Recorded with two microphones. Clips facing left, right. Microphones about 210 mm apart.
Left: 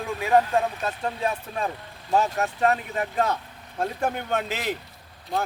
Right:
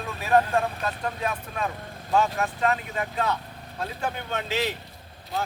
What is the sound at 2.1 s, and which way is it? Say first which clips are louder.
Speech: left 1 dB; 40° left (ahead or behind).